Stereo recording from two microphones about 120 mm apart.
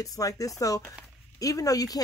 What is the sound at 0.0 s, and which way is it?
Speech, 30° left (ahead or behind).